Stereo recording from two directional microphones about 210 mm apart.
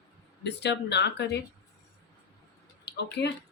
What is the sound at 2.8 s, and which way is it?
Speech, 55° left (ahead or behind).